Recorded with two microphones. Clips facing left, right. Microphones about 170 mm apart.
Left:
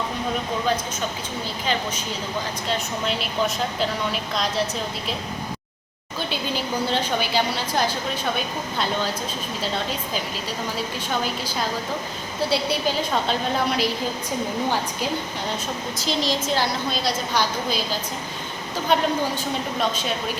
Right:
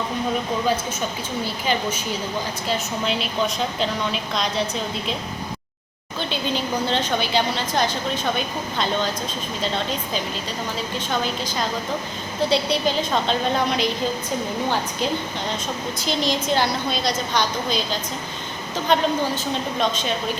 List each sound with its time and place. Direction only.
2.6 s a woman's voice: centre (ahead or behind)
6.8 s a woman's voice: 5° left (ahead or behind)
12.5 s a woman's voice: 5° left (ahead or behind)
16.0 s a woman's voice: centre (ahead or behind)
18.9 s a woman's voice: 10° left (ahead or behind)